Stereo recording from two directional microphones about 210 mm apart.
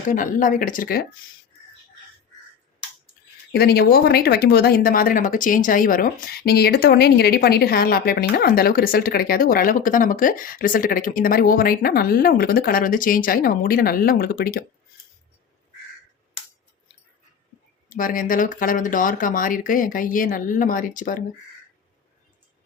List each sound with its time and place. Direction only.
0.1 s speech: 40° left (ahead or behind)
3.5 s speech: 50° left (ahead or behind)
17.8 s speech: 40° left (ahead or behind)